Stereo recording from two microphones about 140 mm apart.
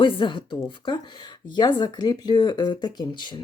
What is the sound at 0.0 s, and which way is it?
Speech, 35° left (ahead or behind).